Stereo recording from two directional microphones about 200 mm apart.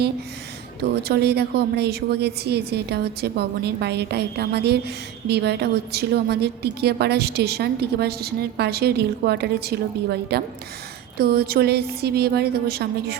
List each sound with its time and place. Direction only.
0.8 s a woman's voice: 55° right (ahead or behind)